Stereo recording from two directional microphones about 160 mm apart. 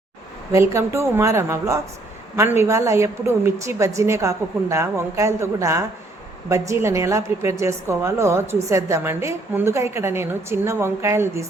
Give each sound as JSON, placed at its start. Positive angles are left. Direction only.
{"t": 0.5, "sound": "a woman's voice", "side_deg": -20}